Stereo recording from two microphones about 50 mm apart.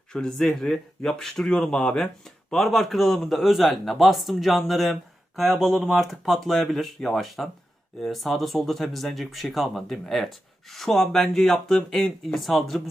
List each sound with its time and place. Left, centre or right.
0.1 s speech: centre
2.2 s a man's voice: centre